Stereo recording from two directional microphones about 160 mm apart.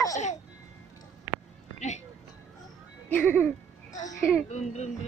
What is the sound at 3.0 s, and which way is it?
Music, 10° left (ahead or behind).